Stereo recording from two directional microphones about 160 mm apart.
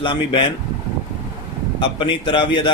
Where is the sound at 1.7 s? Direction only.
30° left (ahead or behind).